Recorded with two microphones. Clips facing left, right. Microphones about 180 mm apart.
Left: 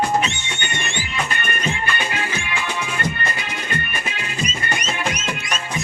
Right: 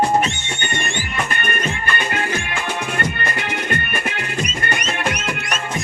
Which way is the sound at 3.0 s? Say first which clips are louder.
Right 2 dB; 60° right (ahead or behind).